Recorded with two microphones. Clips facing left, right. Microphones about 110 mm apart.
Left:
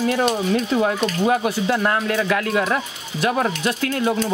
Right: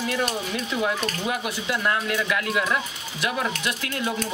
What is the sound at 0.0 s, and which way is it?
Speech, 35° left (ahead or behind).